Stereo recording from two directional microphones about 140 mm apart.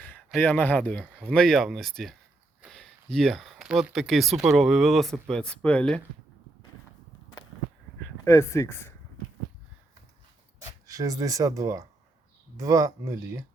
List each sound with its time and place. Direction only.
0.3 s speech: 10° left (ahead or behind)
8.2 s speech: 20° left (ahead or behind)
10.8 s speech: 25° right (ahead or behind)